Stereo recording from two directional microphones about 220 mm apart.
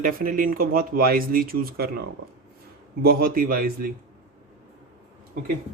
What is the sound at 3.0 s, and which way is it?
Speech, 40° right (ahead or behind).